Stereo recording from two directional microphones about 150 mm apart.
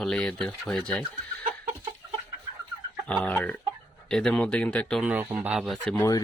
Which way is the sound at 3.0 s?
5° left (ahead or behind).